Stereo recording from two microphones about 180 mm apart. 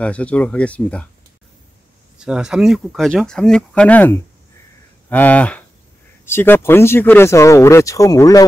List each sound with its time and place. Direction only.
0.0 s speech: 5° left (ahead or behind)
2.1 s speech: 5° right (ahead or behind); by 8.5 s 20° left (ahead or behind)